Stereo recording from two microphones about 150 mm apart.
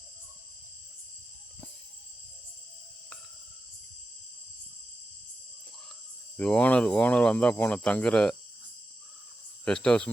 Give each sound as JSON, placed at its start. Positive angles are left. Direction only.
{"t": 6.3, "sound": "speech", "side_deg": 10}
{"t": 9.6, "sound": "speech", "side_deg": 5}